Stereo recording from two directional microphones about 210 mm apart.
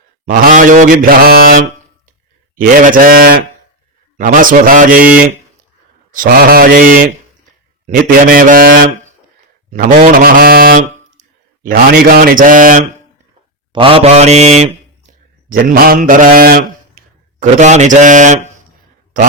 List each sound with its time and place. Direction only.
0.3 s mantra: 40° right (ahead or behind)
6.1 s speech: 45° right (ahead or behind)
8.0 s speech: 40° right (ahead or behind)
11.6 s mantra: 45° right (ahead or behind)
13.7 s mantra: 25° right (ahead or behind)
15.4 s mantra: 45° right (ahead or behind)
17.4 s mantra: 35° right (ahead or behind)